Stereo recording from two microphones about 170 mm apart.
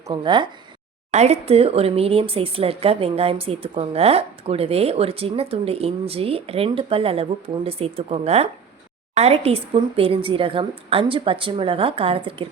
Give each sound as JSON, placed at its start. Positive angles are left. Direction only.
{"t": 0.1, "sound": "speech", "side_deg": -25}
{"t": 1.1, "sound": "speech", "side_deg": -40}